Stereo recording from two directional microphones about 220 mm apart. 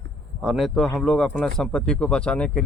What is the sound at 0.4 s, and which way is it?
Speech, centre (ahead or behind).